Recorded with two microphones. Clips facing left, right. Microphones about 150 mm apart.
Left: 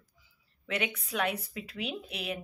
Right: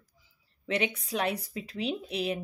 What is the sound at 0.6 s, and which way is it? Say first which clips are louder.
Speech: right 4 dB; 30° right (ahead or behind).